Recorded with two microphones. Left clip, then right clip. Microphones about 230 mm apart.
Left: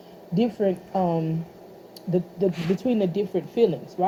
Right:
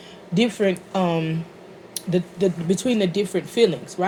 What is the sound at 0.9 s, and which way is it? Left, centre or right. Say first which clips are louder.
Speech: right 2 dB; right.